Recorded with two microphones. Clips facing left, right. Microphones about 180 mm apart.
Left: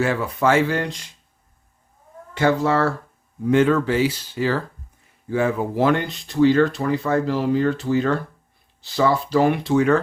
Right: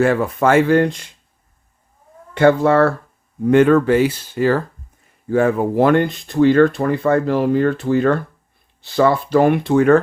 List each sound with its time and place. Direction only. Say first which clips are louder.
0.0 s speech: right 5 dB; 55° right (ahead or behind)
2.3 s speech: right 6 dB; 55° right (ahead or behind)